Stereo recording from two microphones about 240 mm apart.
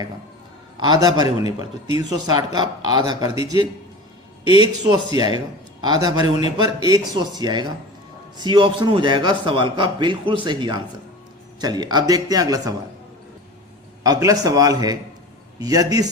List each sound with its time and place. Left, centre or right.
0.8 s speech: centre
4.4 s a man's voice: left
4.8 s a man's voice: centre
14.0 s speech: centre